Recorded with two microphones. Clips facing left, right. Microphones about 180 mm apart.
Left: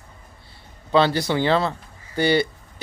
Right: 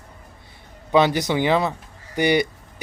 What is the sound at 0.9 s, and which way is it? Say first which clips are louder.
A man's voice: right 1 dB; 15° right (ahead or behind).